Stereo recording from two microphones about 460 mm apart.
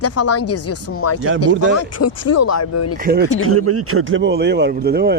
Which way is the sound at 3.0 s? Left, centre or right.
Centre.